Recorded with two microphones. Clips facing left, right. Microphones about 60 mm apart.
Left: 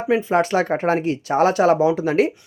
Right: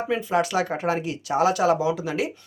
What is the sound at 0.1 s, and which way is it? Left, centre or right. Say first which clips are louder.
Speech: left 6 dB; left.